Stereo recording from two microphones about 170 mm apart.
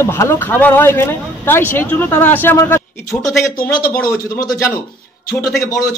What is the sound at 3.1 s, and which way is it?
A man's voice, centre (ahead or behind).